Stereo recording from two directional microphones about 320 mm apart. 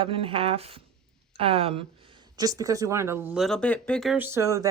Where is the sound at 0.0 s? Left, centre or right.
Centre.